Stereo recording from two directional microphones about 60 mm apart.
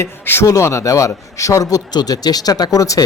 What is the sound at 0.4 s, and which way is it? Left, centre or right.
Speech, left.